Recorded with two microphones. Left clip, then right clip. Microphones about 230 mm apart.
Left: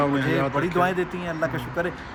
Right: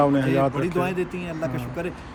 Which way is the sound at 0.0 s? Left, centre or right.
Centre.